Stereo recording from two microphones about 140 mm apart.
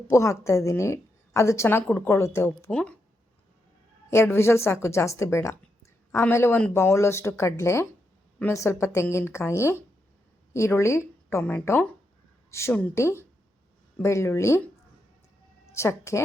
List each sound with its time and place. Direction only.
0.1 s a woman's voice: 20° left (ahead or behind)
2.6 s speech: 5° left (ahead or behind)
4.1 s a woman's voice: 20° left (ahead or behind)
15.7 s a woman's voice: 20° left (ahead or behind)